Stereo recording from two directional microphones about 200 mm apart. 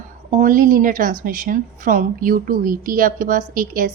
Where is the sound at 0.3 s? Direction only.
40° right (ahead or behind).